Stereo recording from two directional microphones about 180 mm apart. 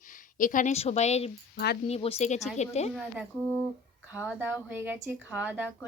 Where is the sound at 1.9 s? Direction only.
35° left (ahead or behind).